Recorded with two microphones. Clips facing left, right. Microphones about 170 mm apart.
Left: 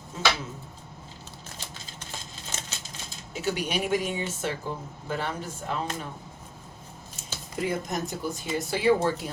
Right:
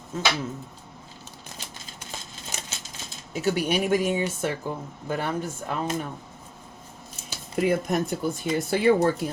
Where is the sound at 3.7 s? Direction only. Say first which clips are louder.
Right 4 dB; 50° right (ahead or behind).